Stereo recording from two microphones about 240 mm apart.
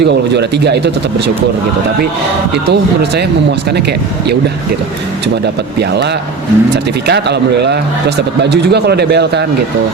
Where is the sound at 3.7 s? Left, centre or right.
Right.